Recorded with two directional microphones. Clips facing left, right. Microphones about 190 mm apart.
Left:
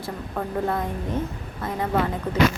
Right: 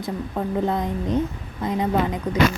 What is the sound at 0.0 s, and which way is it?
A woman's voice, 20° right (ahead or behind).